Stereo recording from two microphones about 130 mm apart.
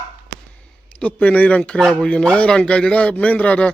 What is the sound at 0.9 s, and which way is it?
Speech, 10° left (ahead or behind).